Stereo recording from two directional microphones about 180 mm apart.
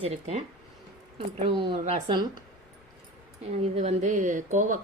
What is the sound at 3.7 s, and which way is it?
Speech, 40° right (ahead or behind).